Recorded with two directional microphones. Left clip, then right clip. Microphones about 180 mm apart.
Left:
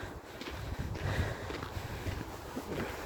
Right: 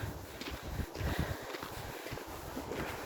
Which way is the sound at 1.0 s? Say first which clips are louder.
Left 2 dB; 40° left (ahead or behind).